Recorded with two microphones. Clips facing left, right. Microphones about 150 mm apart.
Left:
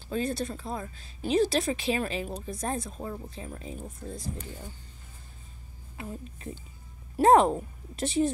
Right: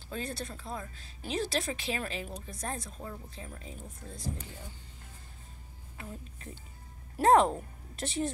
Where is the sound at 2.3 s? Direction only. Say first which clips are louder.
Left 6 dB; 30° left (ahead or behind).